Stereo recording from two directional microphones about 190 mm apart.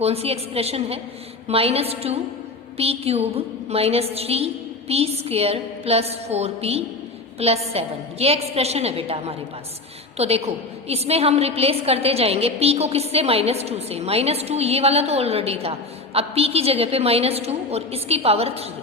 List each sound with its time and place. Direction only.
0.0 s a woman's voice: 30° right (ahead or behind)